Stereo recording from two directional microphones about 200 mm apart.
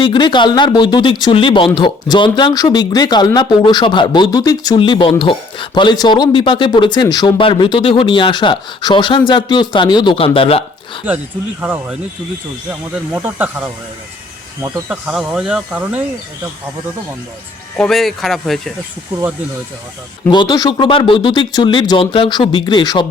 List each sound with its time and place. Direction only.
0.0 s speech: 25° left (ahead or behind)
11.6 s speech: 10° right (ahead or behind)
13.1 s speech: 10° right (ahead or behind)
14.8 s speech: 5° right (ahead or behind)
17.7 s speech: centre (ahead or behind)
20.3 s speech: 20° left (ahead or behind)